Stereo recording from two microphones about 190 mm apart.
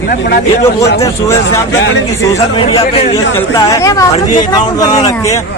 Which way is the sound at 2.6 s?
30° left (ahead or behind).